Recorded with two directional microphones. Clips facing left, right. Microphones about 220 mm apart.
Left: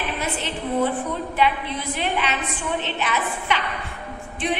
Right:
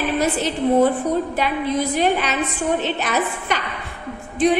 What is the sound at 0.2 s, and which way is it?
A woman's voice, 40° right (ahead or behind).